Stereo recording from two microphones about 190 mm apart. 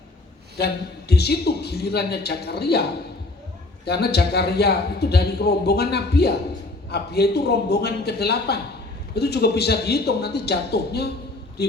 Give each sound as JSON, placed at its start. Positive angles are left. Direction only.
{"t": 0.6, "sound": "a man's voice", "side_deg": 60}
{"t": 3.8, "sound": "a man's voice", "side_deg": 60}